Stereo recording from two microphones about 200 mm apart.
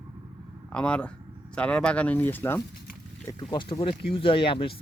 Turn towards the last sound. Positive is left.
turn(degrees=25)  # may be behind; listen again after turning